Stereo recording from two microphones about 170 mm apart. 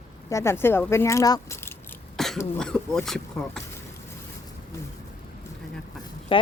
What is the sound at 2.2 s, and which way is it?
Cough, centre (ahead or behind).